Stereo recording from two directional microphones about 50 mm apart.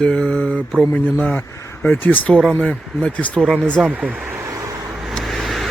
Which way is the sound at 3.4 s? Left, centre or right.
Centre.